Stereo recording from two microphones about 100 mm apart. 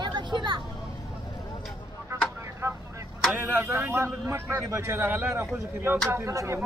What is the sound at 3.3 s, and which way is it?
A man's voice, 25° right (ahead or behind).